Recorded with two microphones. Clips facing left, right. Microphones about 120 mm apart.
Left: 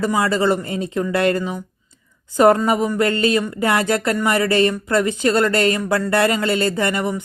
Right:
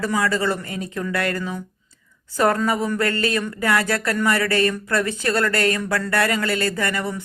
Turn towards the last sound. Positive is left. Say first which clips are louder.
# left 4 dB
turn(degrees=20)  # may be behind; listen again after turning